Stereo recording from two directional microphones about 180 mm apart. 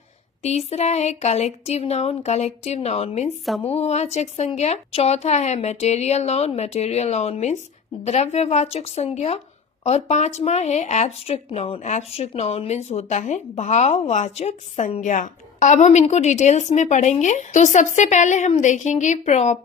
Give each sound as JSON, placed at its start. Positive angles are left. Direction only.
{"t": 0.4, "sound": "a woman's voice", "side_deg": 35}